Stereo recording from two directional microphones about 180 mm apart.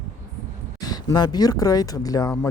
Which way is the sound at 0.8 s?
20° left (ahead or behind).